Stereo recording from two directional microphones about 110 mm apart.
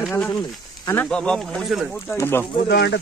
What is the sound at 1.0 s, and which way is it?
Speech, 5° left (ahead or behind).